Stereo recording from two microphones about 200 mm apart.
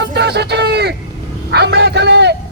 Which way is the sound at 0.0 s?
60° right (ahead or behind).